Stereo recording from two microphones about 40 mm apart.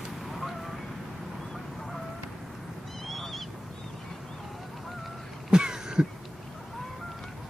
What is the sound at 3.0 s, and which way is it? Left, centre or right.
Goose, centre.